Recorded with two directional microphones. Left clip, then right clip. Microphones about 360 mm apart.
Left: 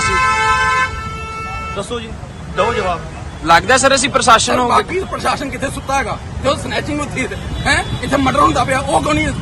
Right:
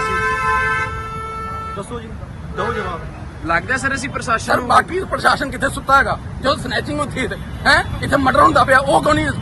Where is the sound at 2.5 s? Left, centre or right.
Left.